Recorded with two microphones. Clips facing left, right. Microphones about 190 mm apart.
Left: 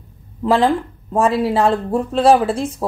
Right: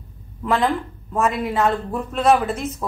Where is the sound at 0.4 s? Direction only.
30° left (ahead or behind).